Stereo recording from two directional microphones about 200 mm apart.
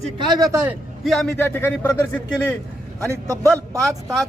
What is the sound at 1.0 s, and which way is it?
Speech, centre (ahead or behind).